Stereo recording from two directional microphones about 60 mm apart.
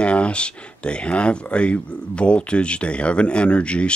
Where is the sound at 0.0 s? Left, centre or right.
Centre.